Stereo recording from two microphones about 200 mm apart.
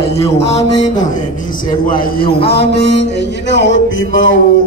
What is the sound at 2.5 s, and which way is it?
Music, 55° left (ahead or behind).